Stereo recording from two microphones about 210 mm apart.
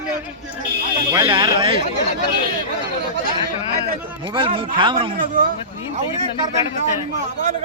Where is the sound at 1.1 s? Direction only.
20° right (ahead or behind).